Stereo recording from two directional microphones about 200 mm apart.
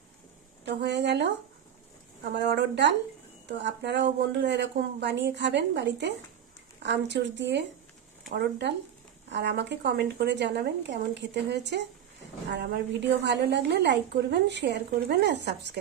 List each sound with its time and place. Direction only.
0.7 s a woman's voice: 60° right (ahead or behind)
2.3 s a woman's voice: 55° right (ahead or behind)